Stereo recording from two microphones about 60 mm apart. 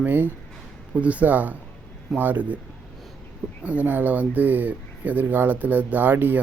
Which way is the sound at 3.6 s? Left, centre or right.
Right.